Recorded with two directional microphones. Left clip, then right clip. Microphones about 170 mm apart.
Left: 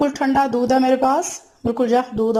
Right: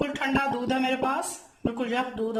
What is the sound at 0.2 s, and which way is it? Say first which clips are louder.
Speech: left 9 dB; 35° left (ahead or behind).